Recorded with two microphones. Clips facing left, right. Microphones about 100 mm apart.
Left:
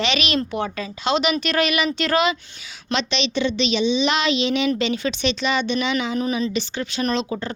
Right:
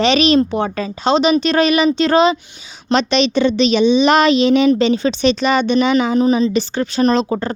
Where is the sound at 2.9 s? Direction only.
45° right (ahead or behind).